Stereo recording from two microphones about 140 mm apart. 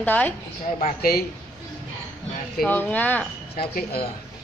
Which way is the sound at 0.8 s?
90° left.